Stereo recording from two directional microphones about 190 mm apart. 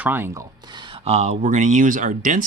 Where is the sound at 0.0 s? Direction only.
10° right (ahead or behind).